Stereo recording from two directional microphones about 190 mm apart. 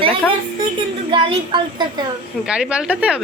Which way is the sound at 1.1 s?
25° right (ahead or behind).